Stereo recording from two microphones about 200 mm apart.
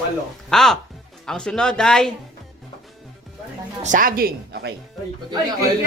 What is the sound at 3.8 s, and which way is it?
Speech, 40° right (ahead or behind).